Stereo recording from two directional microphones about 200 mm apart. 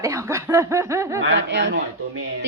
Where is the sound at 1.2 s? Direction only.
65° right (ahead or behind).